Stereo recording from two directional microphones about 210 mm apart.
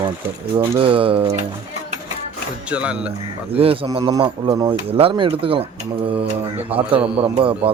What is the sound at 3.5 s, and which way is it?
A man's voice, 25° right (ahead or behind).